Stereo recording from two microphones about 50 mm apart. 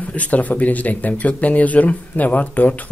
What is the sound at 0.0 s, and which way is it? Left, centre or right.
Speech, left.